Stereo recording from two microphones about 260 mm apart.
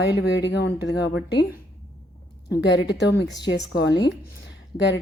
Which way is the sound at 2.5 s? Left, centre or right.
Left.